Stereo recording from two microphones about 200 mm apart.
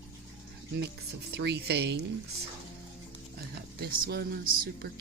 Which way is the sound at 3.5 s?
50° right (ahead or behind).